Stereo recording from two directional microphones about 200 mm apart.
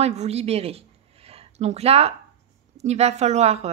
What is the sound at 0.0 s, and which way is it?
Speech, 30° right (ahead or behind).